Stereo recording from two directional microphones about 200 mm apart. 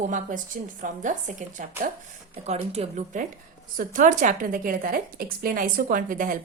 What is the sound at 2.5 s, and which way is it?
A woman's voice, 30° right (ahead or behind).